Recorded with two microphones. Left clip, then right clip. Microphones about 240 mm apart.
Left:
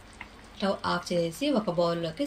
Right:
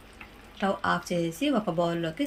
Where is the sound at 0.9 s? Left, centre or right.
Right.